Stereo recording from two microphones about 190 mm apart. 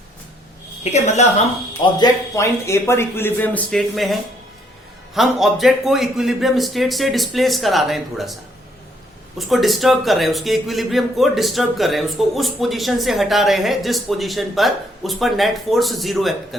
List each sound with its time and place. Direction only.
0.9 s a woman's voice: 35° left (ahead or behind)
1.8 s a man's voice: 20° left (ahead or behind); by 8.4 s centre (ahead or behind)
9.5 s a man's voice: centre (ahead or behind)